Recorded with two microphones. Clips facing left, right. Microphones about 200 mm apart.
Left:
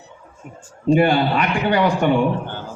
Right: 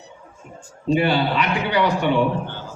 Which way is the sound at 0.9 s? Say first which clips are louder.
Left 3 dB; 50° left (ahead or behind).